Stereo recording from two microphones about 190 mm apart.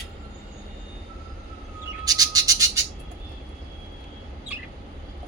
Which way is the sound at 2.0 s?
20° right (ahead or behind).